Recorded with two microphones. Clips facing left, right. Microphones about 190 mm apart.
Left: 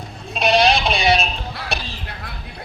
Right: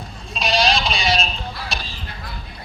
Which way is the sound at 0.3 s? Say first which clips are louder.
Left 4 dB; 60° left (ahead or behind).